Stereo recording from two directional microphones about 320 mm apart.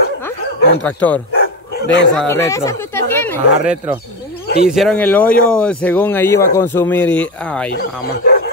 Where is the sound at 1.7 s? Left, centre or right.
Left.